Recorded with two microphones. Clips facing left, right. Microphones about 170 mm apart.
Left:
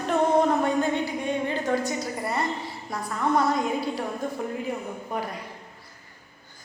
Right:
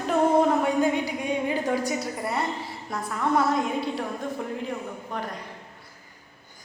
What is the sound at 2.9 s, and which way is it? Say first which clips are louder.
A woman's voice: even; centre (ahead or behind).